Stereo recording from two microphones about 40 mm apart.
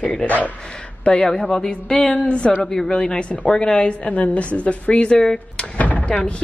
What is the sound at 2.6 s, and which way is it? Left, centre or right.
Speech, centre.